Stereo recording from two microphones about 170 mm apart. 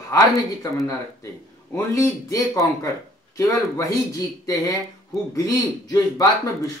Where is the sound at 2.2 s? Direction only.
20° left (ahead or behind).